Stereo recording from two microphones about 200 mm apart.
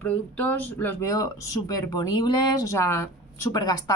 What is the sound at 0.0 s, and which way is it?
A woman's voice, 10° left (ahead or behind).